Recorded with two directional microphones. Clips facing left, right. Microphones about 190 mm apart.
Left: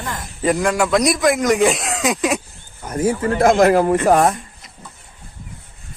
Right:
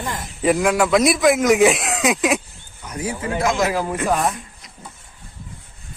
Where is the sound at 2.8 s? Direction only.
50° left (ahead or behind).